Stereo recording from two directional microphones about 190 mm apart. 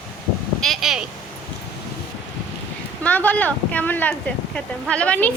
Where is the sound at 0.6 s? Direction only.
Centre (ahead or behind).